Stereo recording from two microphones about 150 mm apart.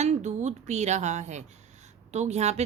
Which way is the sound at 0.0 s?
50° right (ahead or behind).